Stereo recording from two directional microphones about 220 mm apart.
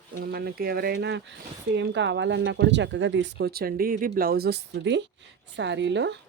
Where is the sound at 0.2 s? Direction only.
45° right (ahead or behind).